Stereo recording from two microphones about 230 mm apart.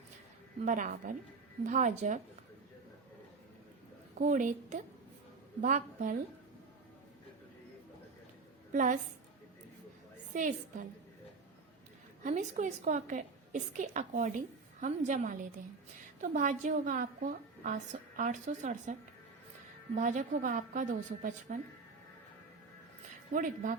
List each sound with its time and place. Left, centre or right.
0.6 s a woman's voice: right
4.2 s a woman's voice: right
8.7 s a woman's voice: right
10.3 s a woman's voice: right
12.2 s a woman's voice: right
18.2 s a woman's voice: right
20.0 s a woman's voice: right
23.3 s a woman's voice: right